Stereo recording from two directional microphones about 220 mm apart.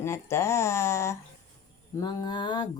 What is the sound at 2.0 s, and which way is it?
Mantra, 20° left (ahead or behind).